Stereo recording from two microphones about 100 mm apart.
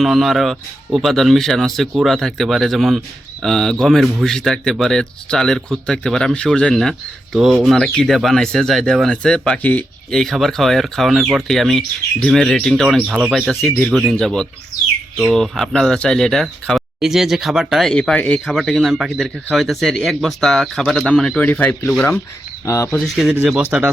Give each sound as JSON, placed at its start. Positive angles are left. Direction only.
{"t": 0.0, "sound": "speech", "side_deg": 0}
{"t": 7.3, "sound": "speech", "side_deg": -5}
{"t": 22.6, "sound": "speech", "side_deg": 30}
{"t": 23.0, "sound": "speech", "side_deg": 0}